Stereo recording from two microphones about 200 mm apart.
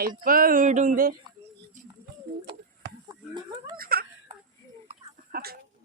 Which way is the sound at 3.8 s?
50° right (ahead or behind).